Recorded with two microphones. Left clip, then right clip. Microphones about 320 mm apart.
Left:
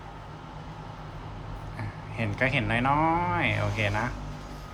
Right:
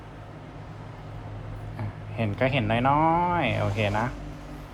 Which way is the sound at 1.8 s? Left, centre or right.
Centre.